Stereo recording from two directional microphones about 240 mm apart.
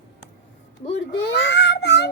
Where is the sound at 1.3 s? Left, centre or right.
Left.